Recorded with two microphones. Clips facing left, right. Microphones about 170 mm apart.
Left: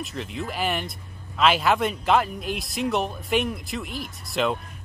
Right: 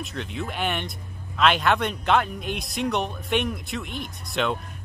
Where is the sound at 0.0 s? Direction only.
Centre (ahead or behind).